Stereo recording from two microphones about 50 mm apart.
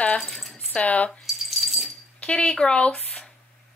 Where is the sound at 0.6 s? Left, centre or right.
Left.